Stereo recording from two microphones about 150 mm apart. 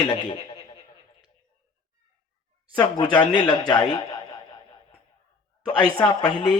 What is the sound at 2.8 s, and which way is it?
Speech, 30° left (ahead or behind).